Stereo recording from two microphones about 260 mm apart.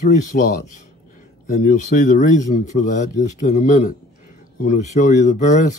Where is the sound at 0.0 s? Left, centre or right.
Left.